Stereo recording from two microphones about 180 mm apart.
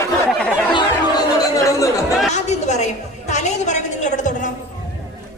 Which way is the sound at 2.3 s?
40° left (ahead or behind).